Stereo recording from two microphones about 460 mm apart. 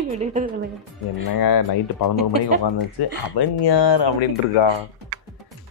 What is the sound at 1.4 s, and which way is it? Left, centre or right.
Speech, left.